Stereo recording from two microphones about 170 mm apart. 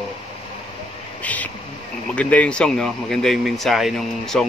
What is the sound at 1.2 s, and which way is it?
Speech, 10° left (ahead or behind).